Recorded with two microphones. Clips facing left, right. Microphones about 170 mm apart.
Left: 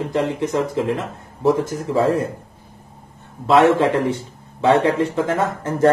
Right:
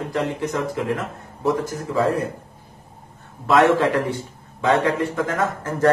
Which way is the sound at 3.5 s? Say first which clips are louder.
Left 2 dB; 25° left (ahead or behind).